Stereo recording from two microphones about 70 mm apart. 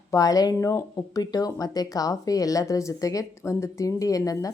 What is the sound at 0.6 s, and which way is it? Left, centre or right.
Speech, left.